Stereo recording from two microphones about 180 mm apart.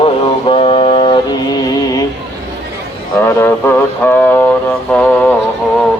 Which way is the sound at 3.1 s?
10° left (ahead or behind).